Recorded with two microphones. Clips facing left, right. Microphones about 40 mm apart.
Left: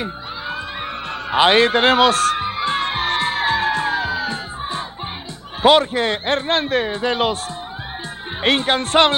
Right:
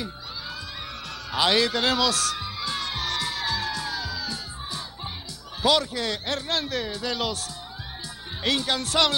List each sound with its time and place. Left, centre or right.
0.0 s music: left
5.6 s a man's voice: left
8.4 s a man's voice: left